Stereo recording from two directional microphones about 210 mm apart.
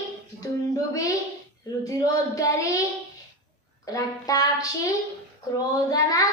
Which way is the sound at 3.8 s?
15° left (ahead or behind).